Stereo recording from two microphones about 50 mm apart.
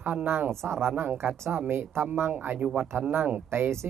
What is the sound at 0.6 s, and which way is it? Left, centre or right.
Speech, right.